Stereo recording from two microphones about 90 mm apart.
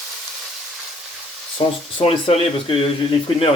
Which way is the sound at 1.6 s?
90° left.